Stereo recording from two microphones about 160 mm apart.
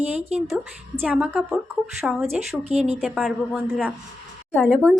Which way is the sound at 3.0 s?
5° right (ahead or behind).